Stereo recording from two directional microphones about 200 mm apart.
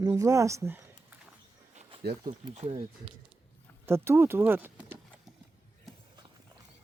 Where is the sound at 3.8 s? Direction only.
10° right (ahead or behind).